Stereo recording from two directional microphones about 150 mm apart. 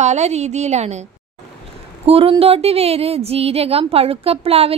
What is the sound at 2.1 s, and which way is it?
A woman's voice, 40° right (ahead or behind).